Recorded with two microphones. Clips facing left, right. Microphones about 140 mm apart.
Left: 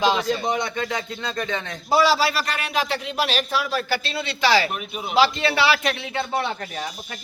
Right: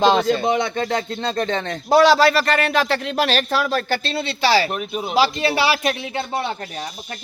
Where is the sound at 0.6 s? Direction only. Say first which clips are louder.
Right 5 dB; 35° right (ahead or behind).